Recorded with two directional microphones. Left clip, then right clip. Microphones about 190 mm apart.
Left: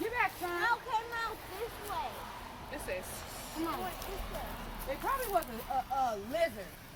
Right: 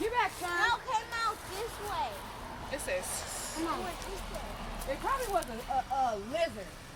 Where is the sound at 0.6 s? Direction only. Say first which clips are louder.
Right 2 dB; 55° right (ahead or behind).